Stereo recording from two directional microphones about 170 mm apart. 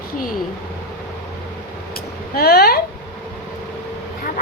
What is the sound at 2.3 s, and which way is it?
Speech, 65° left (ahead or behind).